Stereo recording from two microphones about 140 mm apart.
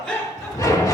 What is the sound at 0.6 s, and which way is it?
Music, 25° left (ahead or behind).